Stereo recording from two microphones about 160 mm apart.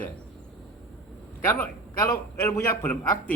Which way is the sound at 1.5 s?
15° left (ahead or behind).